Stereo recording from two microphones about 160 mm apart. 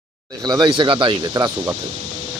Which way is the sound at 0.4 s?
25° right (ahead or behind).